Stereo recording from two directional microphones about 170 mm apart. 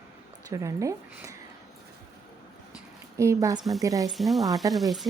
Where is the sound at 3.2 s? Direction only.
20° right (ahead or behind).